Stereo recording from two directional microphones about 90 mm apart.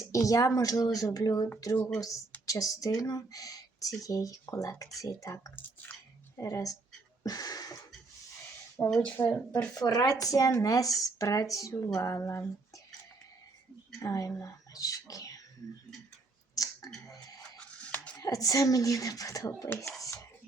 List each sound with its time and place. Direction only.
0.0 s speech: 35° left (ahead or behind)
1.7 s speech: 25° left (ahead or behind)
2.0 s speech: 40° left (ahead or behind)
5.5 s squish: 20° left (ahead or behind)
6.4 s speech: 40° left (ahead or behind)
7.2 s a sound: 40° left (ahead or behind)
9.0 s speech: 25° left (ahead or behind)
9.7 s speech: 45° left (ahead or behind)
14.0 s speech: 40° left (ahead or behind)
16.6 s a sound: 45° left (ahead or behind)
17.7 s a sound: 15° left (ahead or behind)
18.2 s speech: 40° left (ahead or behind)
19.7 s speech: 25° left (ahead or behind)